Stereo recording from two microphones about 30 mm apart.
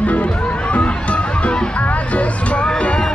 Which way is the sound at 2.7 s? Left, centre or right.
Left.